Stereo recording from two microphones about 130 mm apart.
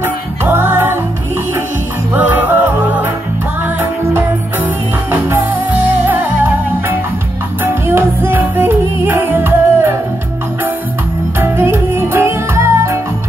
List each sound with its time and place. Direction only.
0.0 s music: 15° right (ahead or behind)
2.1 s music: 15° right (ahead or behind)
5.1 s music: 15° right (ahead or behind)
11.3 s music: 20° right (ahead or behind)